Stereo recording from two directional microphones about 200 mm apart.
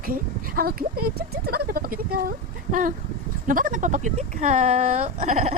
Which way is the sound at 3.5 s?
40° right (ahead or behind).